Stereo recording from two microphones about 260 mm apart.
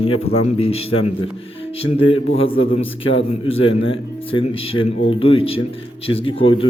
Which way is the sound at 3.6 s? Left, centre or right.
Left.